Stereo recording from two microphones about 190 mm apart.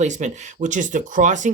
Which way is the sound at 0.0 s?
40° right (ahead or behind).